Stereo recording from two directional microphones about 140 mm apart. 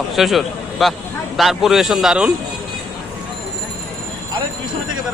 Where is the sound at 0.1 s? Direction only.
Centre (ahead or behind).